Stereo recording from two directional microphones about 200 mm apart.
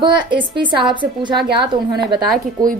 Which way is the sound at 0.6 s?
25° right (ahead or behind).